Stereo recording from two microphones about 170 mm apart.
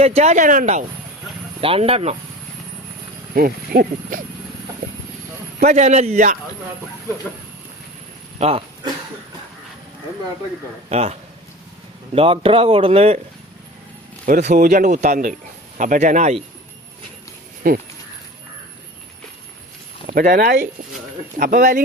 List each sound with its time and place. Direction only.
0.0 s speech: 40° right (ahead or behind)
1.6 s speech: 35° right (ahead or behind)
3.3 s speech: 60° right (ahead or behind)
5.5 s speech: 45° right (ahead or behind)
8.4 s speech: 35° right (ahead or behind)
10.8 s speech: 40° right (ahead or behind)
14.3 s speech: 45° right (ahead or behind)
17.6 s speech: 55° right (ahead or behind)
20.1 s speech: 50° right (ahead or behind)